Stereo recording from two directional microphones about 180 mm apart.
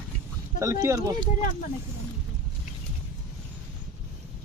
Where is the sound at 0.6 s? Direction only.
20° right (ahead or behind).